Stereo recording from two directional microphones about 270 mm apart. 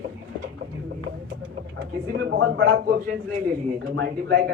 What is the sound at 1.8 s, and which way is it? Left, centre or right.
A man's voice, right.